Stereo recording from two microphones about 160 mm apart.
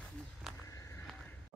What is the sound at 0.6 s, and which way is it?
Walk, 20° left (ahead or behind).